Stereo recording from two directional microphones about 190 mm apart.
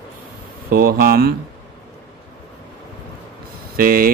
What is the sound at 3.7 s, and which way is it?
Speech, 50° right (ahead or behind).